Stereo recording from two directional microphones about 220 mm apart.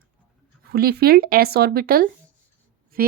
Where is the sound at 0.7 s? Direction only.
45° right (ahead or behind).